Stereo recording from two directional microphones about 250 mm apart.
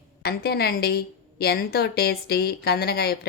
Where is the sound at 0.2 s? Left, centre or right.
Left.